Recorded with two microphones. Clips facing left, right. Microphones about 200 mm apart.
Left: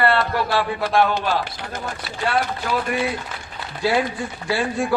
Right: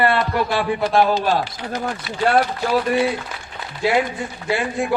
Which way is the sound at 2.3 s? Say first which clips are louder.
Right 4 dB; 45° right (ahead or behind).